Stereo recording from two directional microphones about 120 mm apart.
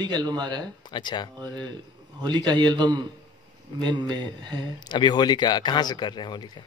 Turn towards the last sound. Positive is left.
turn(degrees=40)  # may be behind; listen again after turning